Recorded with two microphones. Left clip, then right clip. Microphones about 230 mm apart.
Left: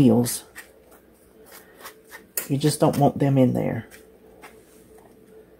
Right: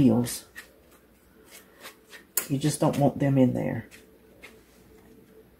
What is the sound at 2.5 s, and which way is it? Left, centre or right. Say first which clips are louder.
Speech: left 5 dB; left.